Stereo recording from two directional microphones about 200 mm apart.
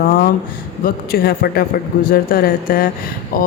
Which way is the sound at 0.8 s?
50° left (ahead or behind).